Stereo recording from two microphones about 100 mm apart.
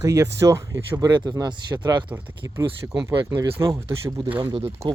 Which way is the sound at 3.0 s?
35° right (ahead or behind).